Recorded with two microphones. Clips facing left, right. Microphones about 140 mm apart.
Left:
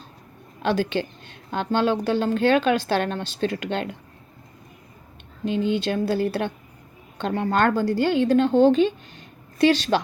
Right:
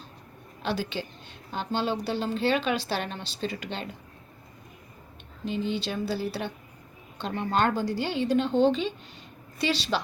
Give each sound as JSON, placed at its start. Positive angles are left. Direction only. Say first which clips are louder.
{"t": 0.6, "sound": "a woman's voice", "louder": "left 8 dB", "side_deg": 50}
{"t": 5.5, "sound": "a woman's voice", "louder": "left 7 dB", "side_deg": 55}